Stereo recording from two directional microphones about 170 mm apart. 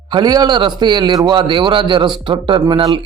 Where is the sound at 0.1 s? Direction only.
25° right (ahead or behind).